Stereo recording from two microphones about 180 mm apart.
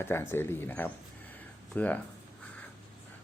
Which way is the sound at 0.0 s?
15° left (ahead or behind).